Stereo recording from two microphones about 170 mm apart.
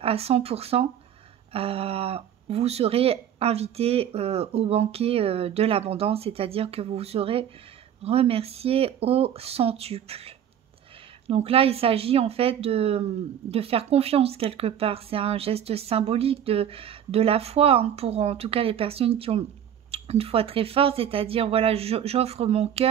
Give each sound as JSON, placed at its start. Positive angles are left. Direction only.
{"t": 0.0, "sound": "speech", "side_deg": -35}